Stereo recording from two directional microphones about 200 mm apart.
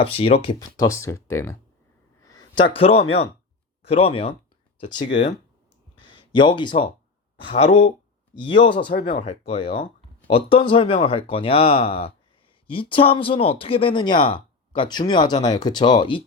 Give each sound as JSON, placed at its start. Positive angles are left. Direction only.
{"t": 0.0, "sound": "speech", "side_deg": 30}
{"t": 0.8, "sound": "speech", "side_deg": 15}
{"t": 2.7, "sound": "speech", "side_deg": 30}
{"t": 6.0, "sound": "a sound", "side_deg": 25}
{"t": 7.4, "sound": "speech", "side_deg": 30}